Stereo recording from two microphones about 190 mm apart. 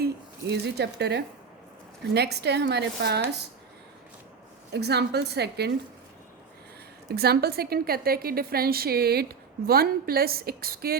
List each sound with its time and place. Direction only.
0.5 s a woman's voice: 60° right (ahead or behind)
4.7 s a woman's voice: 60° right (ahead or behind)
7.1 s a woman's voice: 55° right (ahead or behind)